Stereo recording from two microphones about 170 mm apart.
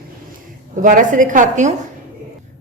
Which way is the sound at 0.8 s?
50° right (ahead or behind).